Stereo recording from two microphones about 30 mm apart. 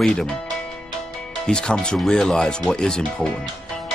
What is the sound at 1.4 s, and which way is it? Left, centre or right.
Speech, left.